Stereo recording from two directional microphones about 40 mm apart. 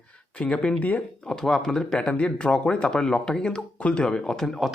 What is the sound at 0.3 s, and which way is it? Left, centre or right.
Speech, left.